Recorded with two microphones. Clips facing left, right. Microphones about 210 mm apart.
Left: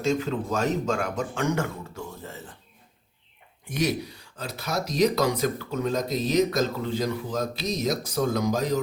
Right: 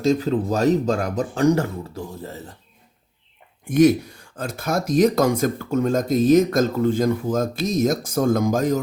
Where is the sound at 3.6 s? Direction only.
50° right (ahead or behind).